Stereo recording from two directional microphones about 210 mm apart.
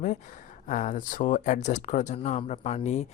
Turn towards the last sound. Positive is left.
turn(degrees=30)  # may be behind; listen again after turning